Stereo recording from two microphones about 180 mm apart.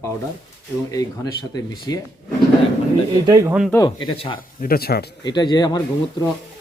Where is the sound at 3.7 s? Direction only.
25° left (ahead or behind).